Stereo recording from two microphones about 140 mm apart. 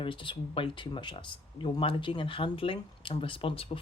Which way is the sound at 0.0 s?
35° left (ahead or behind).